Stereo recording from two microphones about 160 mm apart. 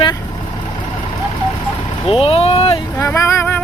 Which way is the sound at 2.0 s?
35° left (ahead or behind).